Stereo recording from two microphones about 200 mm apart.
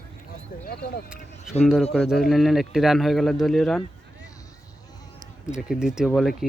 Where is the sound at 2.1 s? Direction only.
Centre (ahead or behind).